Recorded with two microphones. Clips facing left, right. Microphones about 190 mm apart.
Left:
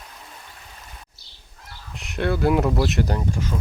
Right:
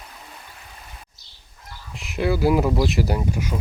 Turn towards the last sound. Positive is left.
turn(degrees=-10)  # may be behind; listen again after turning